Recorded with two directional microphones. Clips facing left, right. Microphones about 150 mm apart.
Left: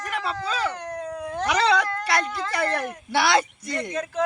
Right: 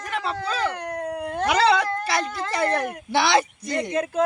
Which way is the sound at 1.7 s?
25° right (ahead or behind).